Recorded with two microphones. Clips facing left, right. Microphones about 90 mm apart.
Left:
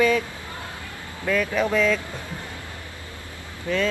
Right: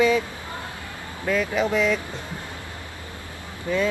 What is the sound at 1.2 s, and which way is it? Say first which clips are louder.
Speech: even; 20° right (ahead or behind).